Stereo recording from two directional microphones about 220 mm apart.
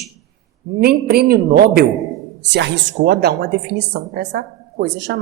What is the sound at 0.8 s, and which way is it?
Speech, 45° right (ahead or behind).